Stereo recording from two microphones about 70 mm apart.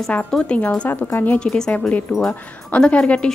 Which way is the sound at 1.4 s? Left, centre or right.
Centre.